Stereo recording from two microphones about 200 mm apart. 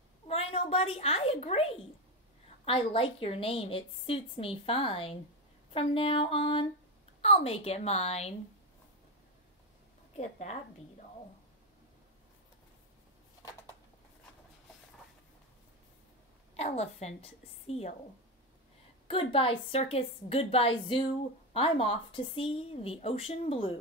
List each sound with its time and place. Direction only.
0.3 s a child's voice: 30° left (ahead or behind)
10.1 s a woman's voice: 35° left (ahead or behind)
16.5 s a woman's voice: 30° left (ahead or behind)
19.0 s a woman's voice: 25° left (ahead or behind)